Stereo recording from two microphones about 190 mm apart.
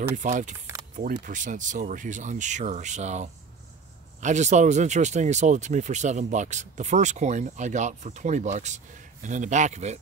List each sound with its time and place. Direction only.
0.1 s speech: 40° right (ahead or behind)